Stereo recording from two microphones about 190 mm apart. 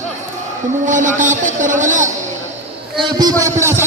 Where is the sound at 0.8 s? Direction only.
40° right (ahead or behind).